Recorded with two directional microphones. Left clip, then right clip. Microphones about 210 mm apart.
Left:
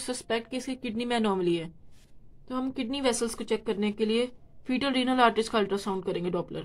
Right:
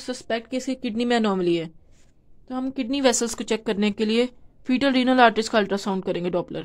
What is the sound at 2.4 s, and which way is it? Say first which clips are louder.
Speech: right 4 dB; 15° right (ahead or behind).